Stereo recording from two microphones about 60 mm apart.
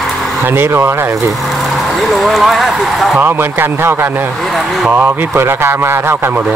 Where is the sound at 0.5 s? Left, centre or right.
Right.